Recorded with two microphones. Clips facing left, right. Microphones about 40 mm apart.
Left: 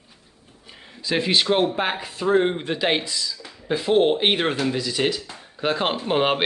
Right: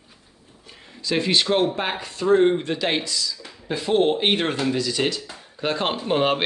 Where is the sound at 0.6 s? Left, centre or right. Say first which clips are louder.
Even; centre.